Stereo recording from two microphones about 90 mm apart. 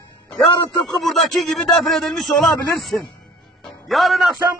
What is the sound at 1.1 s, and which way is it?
A man's voice, centre (ahead or behind).